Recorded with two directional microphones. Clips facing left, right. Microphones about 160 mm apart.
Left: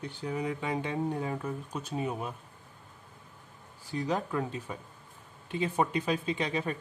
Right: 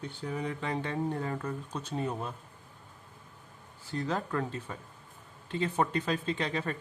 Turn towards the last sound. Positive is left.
turn(degrees=10)  # may be behind; listen again after turning